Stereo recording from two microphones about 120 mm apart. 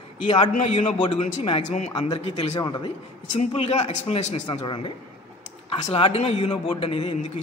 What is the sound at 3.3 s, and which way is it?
A man's voice, 65° left (ahead or behind).